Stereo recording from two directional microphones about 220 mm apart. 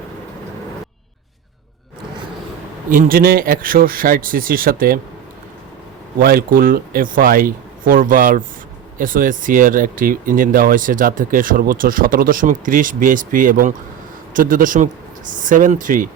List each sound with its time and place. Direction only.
2.9 s speech: 40° right (ahead or behind)
6.1 s speech: 40° right (ahead or behind)